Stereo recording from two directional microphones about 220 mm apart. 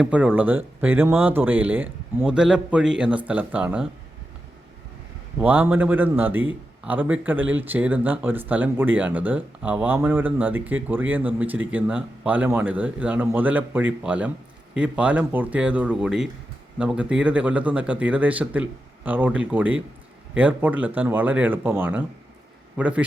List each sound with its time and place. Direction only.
0.0 s speech: 5° right (ahead or behind)
5.4 s speech: 5° right (ahead or behind)